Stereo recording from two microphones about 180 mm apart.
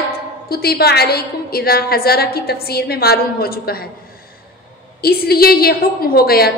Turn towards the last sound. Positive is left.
turn(degrees=55)  # may be behind; listen again after turning